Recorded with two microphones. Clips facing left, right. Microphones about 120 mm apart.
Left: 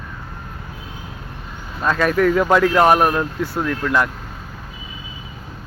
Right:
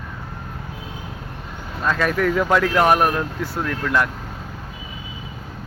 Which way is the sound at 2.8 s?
35° left (ahead or behind).